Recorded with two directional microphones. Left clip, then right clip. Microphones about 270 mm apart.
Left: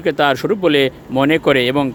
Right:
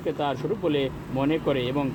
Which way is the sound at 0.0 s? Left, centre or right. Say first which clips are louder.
Left 12 dB; left.